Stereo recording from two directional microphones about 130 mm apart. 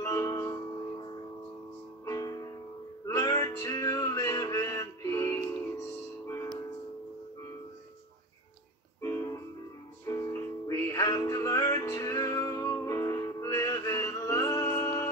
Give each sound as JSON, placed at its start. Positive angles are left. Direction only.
{"t": 0.0, "sound": "music", "side_deg": 25}
{"t": 0.9, "sound": "music", "side_deg": 35}
{"t": 9.0, "sound": "music", "side_deg": 25}